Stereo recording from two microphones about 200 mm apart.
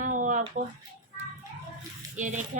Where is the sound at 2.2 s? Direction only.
40° right (ahead or behind).